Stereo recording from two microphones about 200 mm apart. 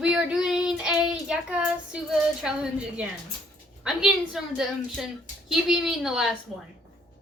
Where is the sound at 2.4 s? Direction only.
5° right (ahead or behind).